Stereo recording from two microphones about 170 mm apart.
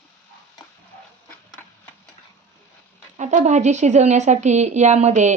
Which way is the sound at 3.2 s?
45° right (ahead or behind).